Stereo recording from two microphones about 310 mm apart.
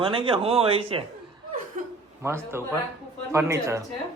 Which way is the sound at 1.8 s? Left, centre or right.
Right.